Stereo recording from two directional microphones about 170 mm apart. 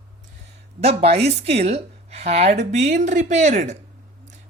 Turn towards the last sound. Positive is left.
turn(degrees=-45)  # may be behind; listen again after turning